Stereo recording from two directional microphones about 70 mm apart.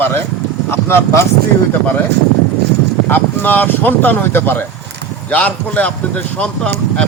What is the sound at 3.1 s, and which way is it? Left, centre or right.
Speech, left.